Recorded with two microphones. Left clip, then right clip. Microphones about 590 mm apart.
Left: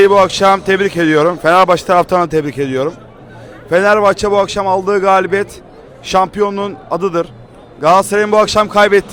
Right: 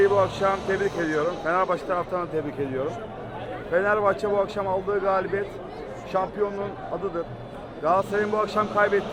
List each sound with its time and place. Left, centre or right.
0.0 s a man's voice: left